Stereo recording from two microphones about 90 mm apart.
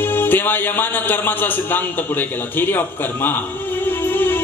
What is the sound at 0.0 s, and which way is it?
A man's voice, 25° left (ahead or behind).